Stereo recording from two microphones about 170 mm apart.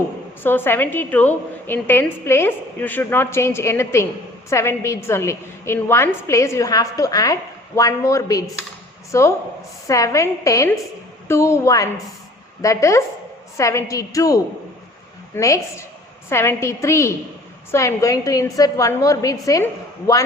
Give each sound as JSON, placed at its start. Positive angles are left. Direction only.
{"t": 0.4, "sound": "a woman's voice", "side_deg": 15}